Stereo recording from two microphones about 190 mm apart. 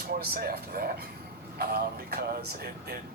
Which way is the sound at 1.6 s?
55° right (ahead or behind).